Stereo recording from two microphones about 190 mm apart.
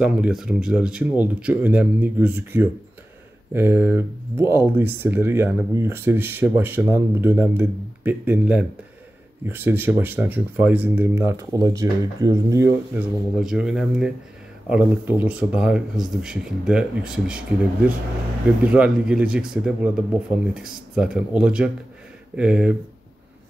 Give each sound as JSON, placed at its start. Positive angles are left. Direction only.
{"t": 0.0, "sound": "speech", "side_deg": -5}
{"t": 13.4, "sound": "speech", "side_deg": -5}
{"t": 18.6, "sound": "speech", "side_deg": -5}